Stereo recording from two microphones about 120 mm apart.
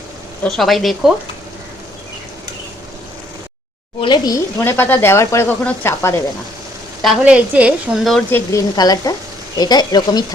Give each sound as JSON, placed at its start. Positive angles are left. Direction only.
{"t": 0.4, "sound": "speech", "side_deg": 0}
{"t": 4.0, "sound": "speech", "side_deg": 35}
{"t": 4.6, "sound": "speech", "side_deg": 20}
{"t": 7.0, "sound": "a woman's voice", "side_deg": 0}
{"t": 8.3, "sound": "speech", "side_deg": 15}
{"t": 8.7, "sound": "speech", "side_deg": 35}